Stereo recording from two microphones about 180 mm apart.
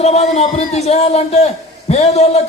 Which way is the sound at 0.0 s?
35° left (ahead or behind).